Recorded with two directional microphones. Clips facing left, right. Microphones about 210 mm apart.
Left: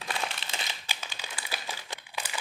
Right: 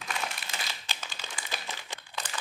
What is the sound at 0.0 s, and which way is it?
Crumpling, 30° left (ahead or behind).